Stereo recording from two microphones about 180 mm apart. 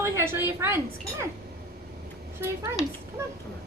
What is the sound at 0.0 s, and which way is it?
Speech, 15° right (ahead or behind).